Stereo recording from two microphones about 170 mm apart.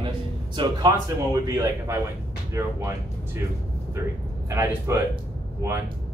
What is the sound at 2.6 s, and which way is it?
Speech, 15° right (ahead or behind).